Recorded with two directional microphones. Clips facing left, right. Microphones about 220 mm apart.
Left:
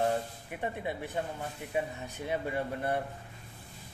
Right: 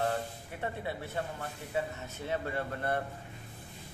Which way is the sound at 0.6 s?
15° left (ahead or behind).